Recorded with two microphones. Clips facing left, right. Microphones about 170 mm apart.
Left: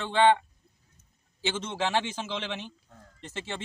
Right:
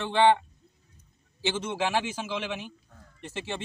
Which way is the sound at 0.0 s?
15° right (ahead or behind).